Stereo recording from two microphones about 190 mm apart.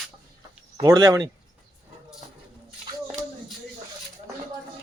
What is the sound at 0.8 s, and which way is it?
Speech, 20° right (ahead or behind).